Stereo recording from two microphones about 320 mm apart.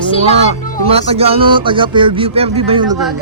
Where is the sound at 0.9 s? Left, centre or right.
Centre.